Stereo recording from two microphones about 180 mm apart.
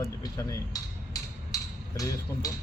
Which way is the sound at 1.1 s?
20° left (ahead or behind).